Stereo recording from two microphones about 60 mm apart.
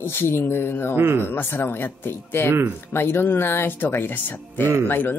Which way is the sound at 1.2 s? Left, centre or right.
Left.